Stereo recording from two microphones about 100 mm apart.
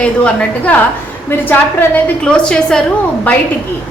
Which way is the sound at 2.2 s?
10° left (ahead or behind).